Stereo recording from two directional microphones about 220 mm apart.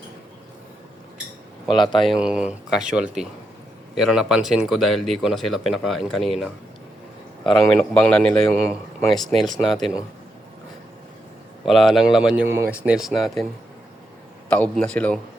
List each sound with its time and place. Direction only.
1.7 s a man's voice: 20° left (ahead or behind)
2.0 s speech: 5° right (ahead or behind)
11.6 s speech: centre (ahead or behind)
14.5 s a man's voice: 5° left (ahead or behind)